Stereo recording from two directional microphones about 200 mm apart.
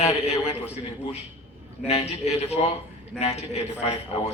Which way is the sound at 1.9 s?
30° left (ahead or behind).